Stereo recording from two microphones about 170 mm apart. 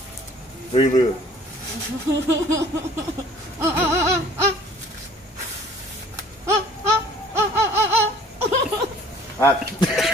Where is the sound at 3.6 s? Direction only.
15° right (ahead or behind).